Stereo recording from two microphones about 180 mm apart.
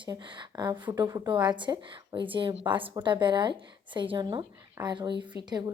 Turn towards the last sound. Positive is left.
turn(degrees=-20)  # may be behind; listen again after turning